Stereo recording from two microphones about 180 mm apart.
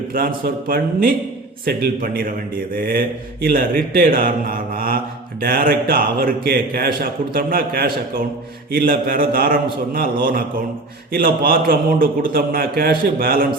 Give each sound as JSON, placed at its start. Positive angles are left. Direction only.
{"t": 0.1, "sound": "speech", "side_deg": -55}